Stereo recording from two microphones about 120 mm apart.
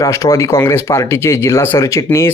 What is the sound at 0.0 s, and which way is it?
Speech, 30° left (ahead or behind).